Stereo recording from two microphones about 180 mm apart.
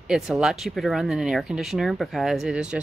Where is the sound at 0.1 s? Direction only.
Centre (ahead or behind).